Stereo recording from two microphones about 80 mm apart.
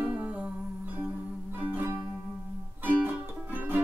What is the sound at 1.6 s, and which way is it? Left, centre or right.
Music, centre.